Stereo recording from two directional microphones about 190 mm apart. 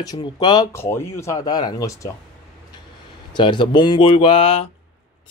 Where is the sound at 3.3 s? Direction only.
25° left (ahead or behind).